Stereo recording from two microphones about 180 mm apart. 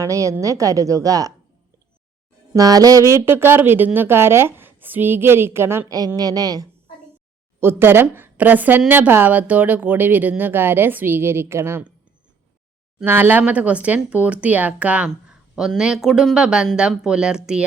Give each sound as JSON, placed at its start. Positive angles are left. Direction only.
{"t": 0.0, "sound": "a woman's voice", "side_deg": -15}
{"t": 2.5, "sound": "a woman's voice", "side_deg": -20}
{"t": 13.0, "sound": "speech", "side_deg": -10}